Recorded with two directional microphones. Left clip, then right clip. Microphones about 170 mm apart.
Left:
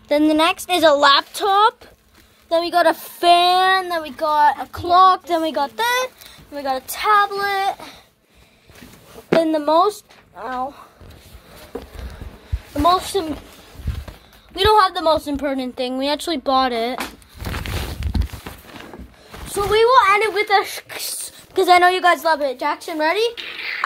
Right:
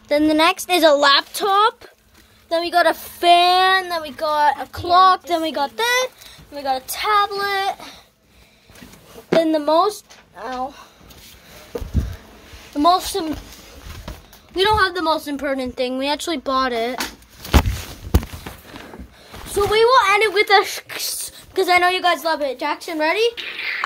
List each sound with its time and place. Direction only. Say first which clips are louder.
0.2 s speech: right 2 dB; centre (ahead or behind)
6.5 s speech: right 1 dB; 20° left (ahead or behind)
9.4 s speech: even; 5° left (ahead or behind)
13.0 s a woman's voice: left 2 dB; 15° left (ahead or behind)
14.5 s a woman's voice: left 2 dB; 45° left (ahead or behind)
15.3 s a woman's voice: even; 15° left (ahead or behind)
18.5 s a sound: even; 20° left (ahead or behind)
19.7 s speech: left 1 dB; centre (ahead or behind)
20.1 s speech: even; 15° right (ahead or behind)
20.3 s a woman's voice: right 2 dB; 30° right (ahead or behind)
20.6 s speech: right 2 dB; 15° right (ahead or behind)
21.6 s a woman's voice: left 3 dB; 25° left (ahead or behind)